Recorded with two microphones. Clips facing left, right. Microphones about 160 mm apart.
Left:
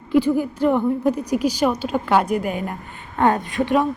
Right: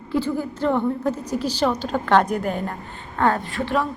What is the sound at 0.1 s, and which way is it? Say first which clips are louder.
A woman's voice: left 6 dB; 15° left (ahead or behind).